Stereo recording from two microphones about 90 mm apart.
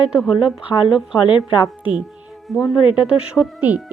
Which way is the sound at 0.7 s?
70° left (ahead or behind).